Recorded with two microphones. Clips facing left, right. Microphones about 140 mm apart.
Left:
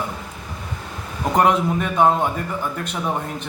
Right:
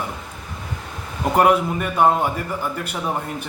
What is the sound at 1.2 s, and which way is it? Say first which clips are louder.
A man's voice: right 1 dB; 5° right (ahead or behind).